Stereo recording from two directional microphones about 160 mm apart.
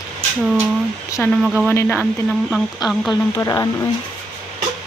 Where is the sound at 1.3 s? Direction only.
5° right (ahead or behind).